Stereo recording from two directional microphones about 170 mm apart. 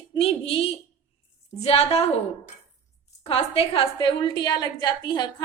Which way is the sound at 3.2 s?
35° left (ahead or behind).